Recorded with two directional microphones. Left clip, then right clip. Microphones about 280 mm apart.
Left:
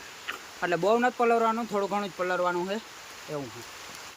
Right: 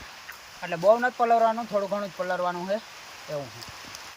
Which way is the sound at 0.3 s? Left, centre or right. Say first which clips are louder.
Left 5 dB; centre.